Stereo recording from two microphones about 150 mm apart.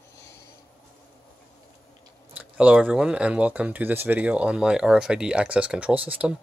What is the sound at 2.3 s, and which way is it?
Speech, 5° right (ahead or behind).